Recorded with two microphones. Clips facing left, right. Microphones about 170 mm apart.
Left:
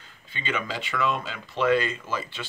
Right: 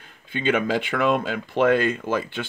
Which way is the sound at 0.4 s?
55° right (ahead or behind).